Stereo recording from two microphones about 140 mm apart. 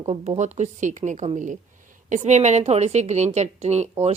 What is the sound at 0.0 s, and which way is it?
A woman's voice, 50° right (ahead or behind).